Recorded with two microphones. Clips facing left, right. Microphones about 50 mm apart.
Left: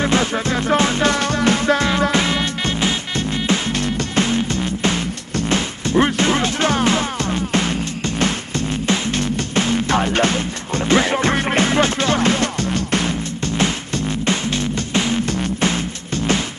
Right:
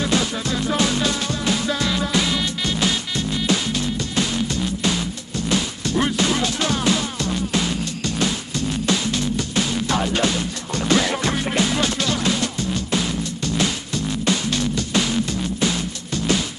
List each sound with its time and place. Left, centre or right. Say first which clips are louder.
0.0 s music: left 4 dB; left
3.7 s music: left 3 dB; left
13.6 s music: left 3 dB; left